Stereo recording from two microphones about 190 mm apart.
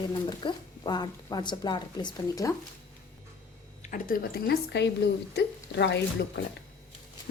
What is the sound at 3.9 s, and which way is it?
A woman's voice, 50° left (ahead or behind).